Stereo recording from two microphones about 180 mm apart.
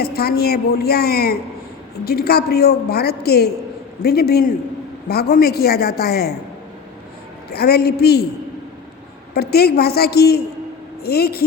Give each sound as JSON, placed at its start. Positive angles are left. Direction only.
{"t": 0.0, "sound": "a woman's voice", "side_deg": 60}
{"t": 7.5, "sound": "a woman's voice", "side_deg": 60}
{"t": 9.3, "sound": "a woman's voice", "side_deg": 60}